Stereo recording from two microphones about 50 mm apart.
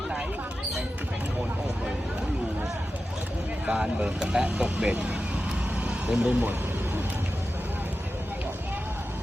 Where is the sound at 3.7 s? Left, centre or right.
Centre.